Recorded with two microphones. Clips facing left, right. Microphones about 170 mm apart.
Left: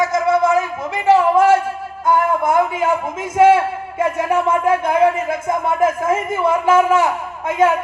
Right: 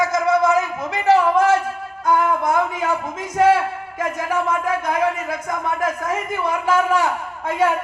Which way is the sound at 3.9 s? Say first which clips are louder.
Left 5 dB; 25° left (ahead or behind).